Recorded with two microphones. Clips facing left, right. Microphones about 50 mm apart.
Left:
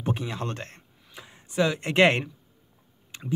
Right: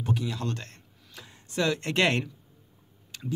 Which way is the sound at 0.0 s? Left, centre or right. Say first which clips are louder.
Left 1 dB; left.